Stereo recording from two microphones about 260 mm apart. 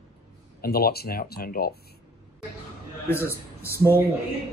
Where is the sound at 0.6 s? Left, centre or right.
Left.